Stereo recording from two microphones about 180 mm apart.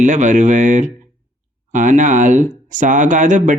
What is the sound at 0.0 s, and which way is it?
A man's voice, 45° right (ahead or behind).